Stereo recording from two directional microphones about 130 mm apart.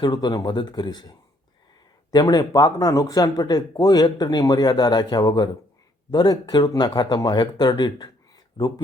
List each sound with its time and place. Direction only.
0.0 s speech: 35° left (ahead or behind)